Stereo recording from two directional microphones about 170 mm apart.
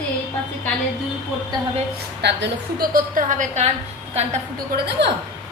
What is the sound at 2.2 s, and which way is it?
A woman's voice, 90° right.